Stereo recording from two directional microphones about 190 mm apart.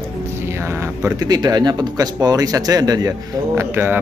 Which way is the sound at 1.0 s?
20° right (ahead or behind).